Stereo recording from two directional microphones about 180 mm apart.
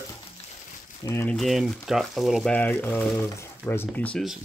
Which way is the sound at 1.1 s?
15° left (ahead or behind).